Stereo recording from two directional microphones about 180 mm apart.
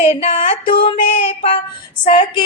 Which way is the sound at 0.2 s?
35° left (ahead or behind).